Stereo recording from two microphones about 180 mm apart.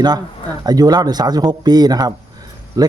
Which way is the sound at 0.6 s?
20° right (ahead or behind).